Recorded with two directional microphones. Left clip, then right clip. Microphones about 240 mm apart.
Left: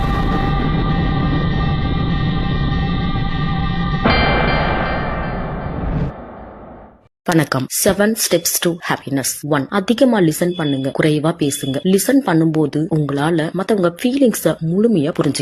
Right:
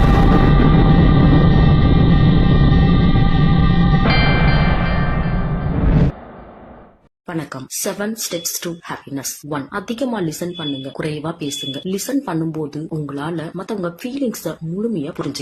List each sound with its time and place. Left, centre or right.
0.0 s music: centre
5.8 s a sound: centre
7.3 s speech: left